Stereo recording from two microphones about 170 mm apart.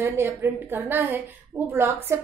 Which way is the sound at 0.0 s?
10° right (ahead or behind).